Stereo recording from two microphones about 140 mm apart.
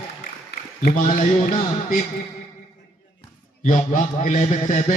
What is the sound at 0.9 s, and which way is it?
A man's voice, 60° left (ahead or behind).